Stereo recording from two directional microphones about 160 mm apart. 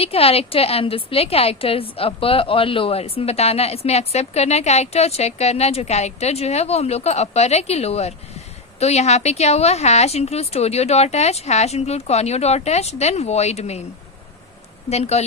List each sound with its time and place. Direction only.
0.0 s a woman's voice: 40° left (ahead or behind)
14.8 s speech: 40° left (ahead or behind)